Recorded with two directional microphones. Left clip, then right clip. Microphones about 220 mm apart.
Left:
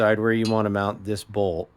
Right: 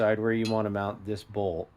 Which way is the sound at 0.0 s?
35° left (ahead or behind).